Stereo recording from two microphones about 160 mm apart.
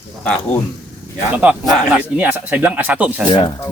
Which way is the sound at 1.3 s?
5° right (ahead or behind).